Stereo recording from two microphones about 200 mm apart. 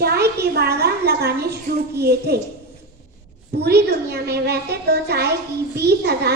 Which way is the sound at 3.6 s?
55° right (ahead or behind).